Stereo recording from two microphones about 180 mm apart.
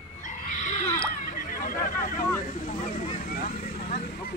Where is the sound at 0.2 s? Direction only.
45° left (ahead or behind).